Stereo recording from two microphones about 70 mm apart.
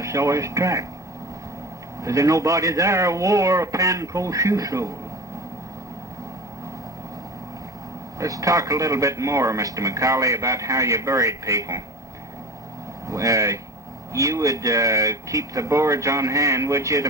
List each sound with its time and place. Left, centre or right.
0.0 s speech: right
2.0 s speech: right
8.2 s speech: right
13.1 s speech: right